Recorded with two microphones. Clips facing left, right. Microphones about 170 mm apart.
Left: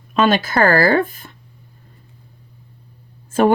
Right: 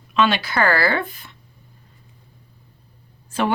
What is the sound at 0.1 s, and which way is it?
Speech, 45° left (ahead or behind).